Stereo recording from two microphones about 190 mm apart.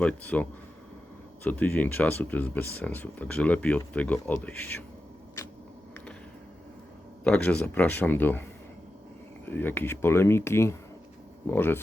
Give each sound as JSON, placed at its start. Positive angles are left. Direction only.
{"t": 0.0, "sound": "speech", "side_deg": 10}
{"t": 1.5, "sound": "speech", "side_deg": 10}
{"t": 7.3, "sound": "speech", "side_deg": 5}
{"t": 9.5, "sound": "speech", "side_deg": 10}